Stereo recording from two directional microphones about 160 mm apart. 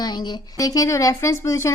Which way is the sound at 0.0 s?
25° left (ahead or behind).